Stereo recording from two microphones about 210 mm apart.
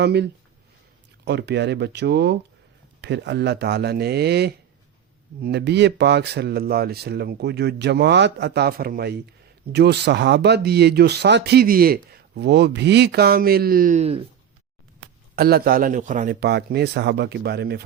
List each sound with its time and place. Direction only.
0.0 s speech: 55° right (ahead or behind); by 14.2 s 30° right (ahead or behind)
15.4 s speech: 45° right (ahead or behind)